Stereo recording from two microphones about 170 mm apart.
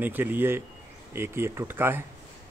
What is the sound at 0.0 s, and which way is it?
Speech, 10° right (ahead or behind).